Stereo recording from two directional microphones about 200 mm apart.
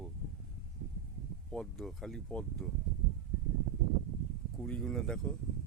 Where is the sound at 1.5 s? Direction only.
Centre (ahead or behind).